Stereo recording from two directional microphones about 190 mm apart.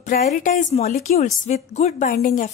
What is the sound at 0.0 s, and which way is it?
A woman's voice, 50° left (ahead or behind).